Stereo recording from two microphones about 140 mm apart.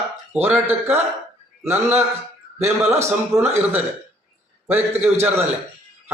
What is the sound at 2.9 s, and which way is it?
Speech, 20° right (ahead or behind).